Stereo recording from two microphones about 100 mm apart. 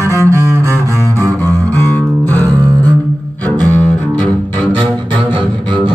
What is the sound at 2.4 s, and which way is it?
Music, 40° right (ahead or behind).